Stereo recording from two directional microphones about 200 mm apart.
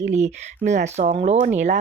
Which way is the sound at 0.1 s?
35° right (ahead or behind).